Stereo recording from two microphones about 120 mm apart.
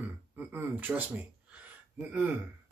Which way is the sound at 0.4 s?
15° right (ahead or behind).